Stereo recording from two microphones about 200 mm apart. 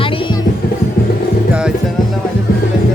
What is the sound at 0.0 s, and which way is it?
Music, 25° left (ahead or behind).